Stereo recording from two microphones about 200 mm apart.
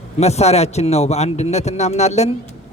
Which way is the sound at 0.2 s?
30° left (ahead or behind).